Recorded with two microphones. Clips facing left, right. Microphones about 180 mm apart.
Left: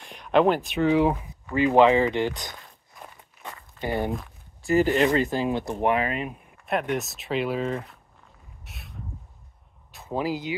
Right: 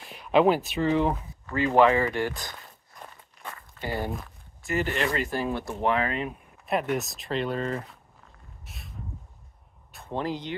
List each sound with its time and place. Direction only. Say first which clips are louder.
0.0 s speech: left 1 dB; 5° right (ahead or behind); by 2.5 s 20° left (ahead or behind)
3.4 s walk: left 4 dB; 20° left (ahead or behind)
5.0 s speech: left 5 dB; 25° left (ahead or behind)
6.6 s speech: left 1 dB; centre (ahead or behind)
8.6 s a sound: left 1 dB; centre (ahead or behind)
9.9 s speech: left 3 dB; 5° left (ahead or behind)